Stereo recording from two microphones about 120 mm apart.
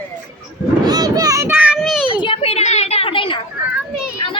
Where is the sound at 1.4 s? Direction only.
15° right (ahead or behind).